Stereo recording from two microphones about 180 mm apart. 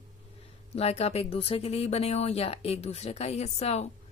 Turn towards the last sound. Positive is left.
turn(degrees=35)  # may be behind; listen again after turning